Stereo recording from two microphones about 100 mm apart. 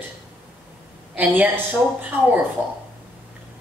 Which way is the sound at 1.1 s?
15° right (ahead or behind).